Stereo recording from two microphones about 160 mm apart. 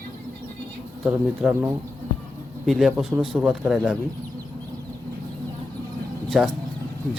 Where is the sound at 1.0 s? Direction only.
5° right (ahead or behind).